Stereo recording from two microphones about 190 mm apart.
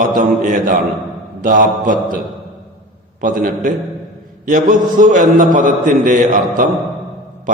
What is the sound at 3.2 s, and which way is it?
A man's voice, 45° right (ahead or behind).